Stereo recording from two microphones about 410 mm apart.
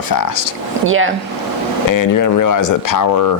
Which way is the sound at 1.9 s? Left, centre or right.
Left.